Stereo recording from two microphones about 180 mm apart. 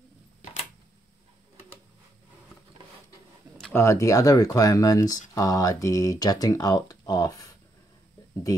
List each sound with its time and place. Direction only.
3.7 s speech: 15° left (ahead or behind)